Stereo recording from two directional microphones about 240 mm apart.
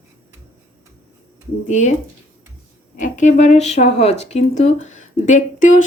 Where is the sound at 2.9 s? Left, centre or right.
Left.